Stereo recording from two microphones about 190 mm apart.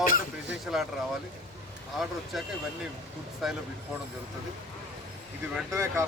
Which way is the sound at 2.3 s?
Centre (ahead or behind).